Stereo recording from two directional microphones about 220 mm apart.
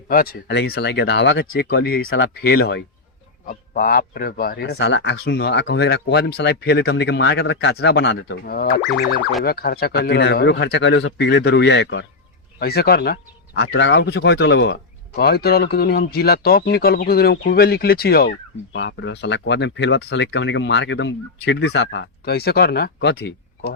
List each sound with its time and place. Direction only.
0.1 s a man's voice: 40° left (ahead or behind)
2.0 s a man's voice: 55° left (ahead or behind)